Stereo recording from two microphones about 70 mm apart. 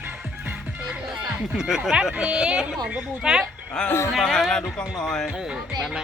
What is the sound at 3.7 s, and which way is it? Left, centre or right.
Speech, centre.